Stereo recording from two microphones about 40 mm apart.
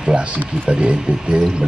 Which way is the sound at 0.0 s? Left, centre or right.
Right.